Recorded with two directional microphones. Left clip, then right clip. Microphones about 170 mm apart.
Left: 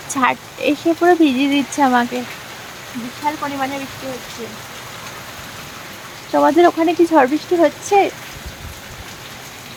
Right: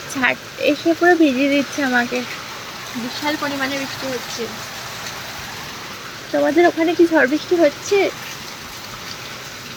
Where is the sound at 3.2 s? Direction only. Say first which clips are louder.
Left 2 dB; 5° right (ahead or behind).